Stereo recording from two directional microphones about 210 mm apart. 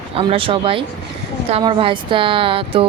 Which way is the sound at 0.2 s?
25° right (ahead or behind).